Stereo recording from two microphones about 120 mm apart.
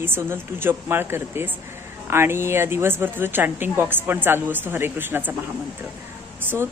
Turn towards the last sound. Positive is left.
turn(degrees=-20)  # may be behind; listen again after turning